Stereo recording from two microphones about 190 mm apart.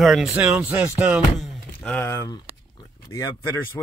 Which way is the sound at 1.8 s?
10° left (ahead or behind).